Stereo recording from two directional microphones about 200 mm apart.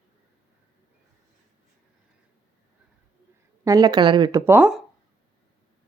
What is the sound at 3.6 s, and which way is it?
Speech, 20° right (ahead or behind).